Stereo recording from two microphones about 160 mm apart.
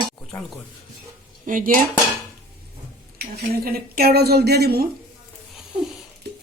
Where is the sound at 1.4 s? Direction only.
55° right (ahead or behind).